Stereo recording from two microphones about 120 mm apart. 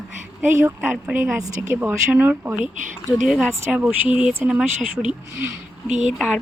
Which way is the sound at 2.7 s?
90° right.